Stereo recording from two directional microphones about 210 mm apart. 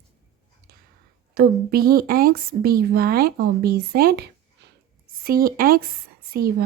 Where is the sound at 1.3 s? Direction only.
45° right (ahead or behind).